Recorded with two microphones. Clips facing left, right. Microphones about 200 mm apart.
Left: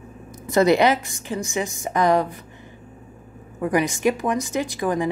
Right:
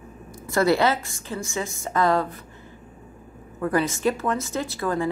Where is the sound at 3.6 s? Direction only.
15° left (ahead or behind).